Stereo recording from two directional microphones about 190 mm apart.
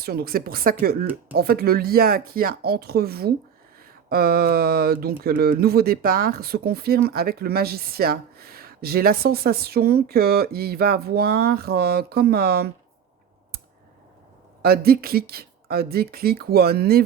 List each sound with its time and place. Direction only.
0.0 s speech: 55° right (ahead or behind)
14.6 s speech: 55° right (ahead or behind)